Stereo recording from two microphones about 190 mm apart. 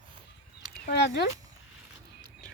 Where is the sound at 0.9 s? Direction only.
60° left (ahead or behind).